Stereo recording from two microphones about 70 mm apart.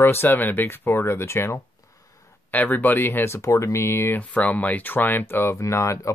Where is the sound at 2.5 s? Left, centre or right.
Left.